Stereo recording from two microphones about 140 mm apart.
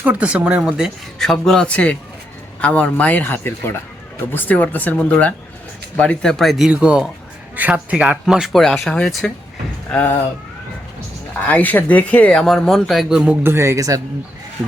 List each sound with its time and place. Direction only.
0.0 s speech: 10° right (ahead or behind)
9.9 s speech: 10° left (ahead or behind)
11.4 s speech: 10° left (ahead or behind)
13.4 s speech: 20° right (ahead or behind)